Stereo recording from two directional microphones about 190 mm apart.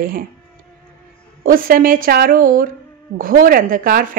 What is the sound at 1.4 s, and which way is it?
Speech, 50° right (ahead or behind).